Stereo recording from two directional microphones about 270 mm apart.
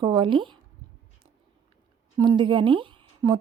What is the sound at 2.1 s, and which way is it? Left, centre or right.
Speech, centre.